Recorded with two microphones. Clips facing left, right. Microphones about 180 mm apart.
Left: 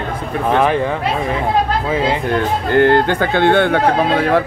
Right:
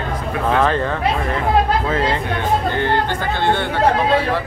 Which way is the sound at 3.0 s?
60° left (ahead or behind).